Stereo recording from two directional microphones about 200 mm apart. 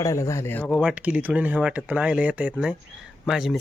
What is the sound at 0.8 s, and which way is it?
Speech, 5° right (ahead or behind).